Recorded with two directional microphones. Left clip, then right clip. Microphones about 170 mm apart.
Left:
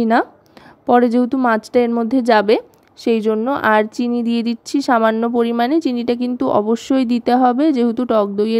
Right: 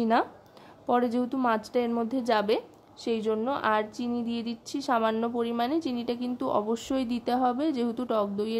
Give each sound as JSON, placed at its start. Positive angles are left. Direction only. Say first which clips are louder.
{"t": 0.0, "sound": "a woman's voice", "louder": "left 9 dB", "side_deg": 40}